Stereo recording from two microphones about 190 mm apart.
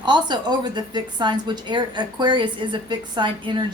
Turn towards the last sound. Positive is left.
turn(degrees=-25)  # may be behind; listen again after turning